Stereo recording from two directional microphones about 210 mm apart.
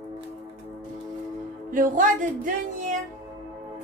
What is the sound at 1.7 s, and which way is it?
Speech, 40° right (ahead or behind).